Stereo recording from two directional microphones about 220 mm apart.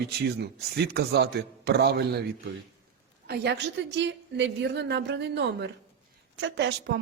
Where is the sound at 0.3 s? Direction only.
50° right (ahead or behind).